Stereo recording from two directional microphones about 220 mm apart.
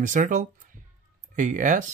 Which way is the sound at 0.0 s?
35° right (ahead or behind).